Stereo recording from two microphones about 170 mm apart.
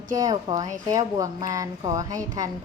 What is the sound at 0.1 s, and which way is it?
Speech, 20° right (ahead or behind).